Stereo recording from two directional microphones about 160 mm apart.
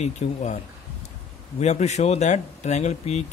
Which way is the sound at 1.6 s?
45° left (ahead or behind).